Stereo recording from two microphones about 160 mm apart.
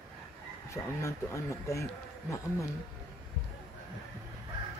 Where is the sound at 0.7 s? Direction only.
20° left (ahead or behind).